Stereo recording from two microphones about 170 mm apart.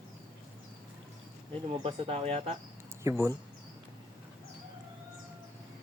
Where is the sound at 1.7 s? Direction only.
30° right (ahead or behind).